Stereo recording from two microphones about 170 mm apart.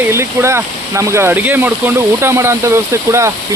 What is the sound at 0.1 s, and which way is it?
Speech, 15° right (ahead or behind).